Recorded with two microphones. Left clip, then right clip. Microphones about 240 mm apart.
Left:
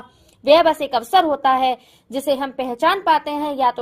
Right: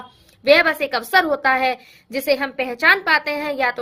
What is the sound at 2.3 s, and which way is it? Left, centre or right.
A woman's voice, centre.